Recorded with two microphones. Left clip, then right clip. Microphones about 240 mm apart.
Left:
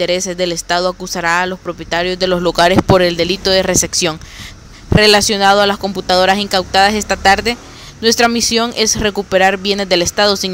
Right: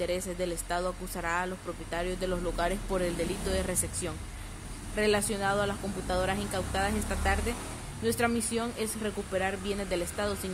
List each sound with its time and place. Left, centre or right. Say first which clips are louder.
0.0 s speech: left 16 dB; left